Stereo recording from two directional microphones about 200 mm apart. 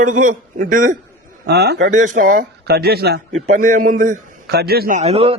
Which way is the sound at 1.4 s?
55° right (ahead or behind).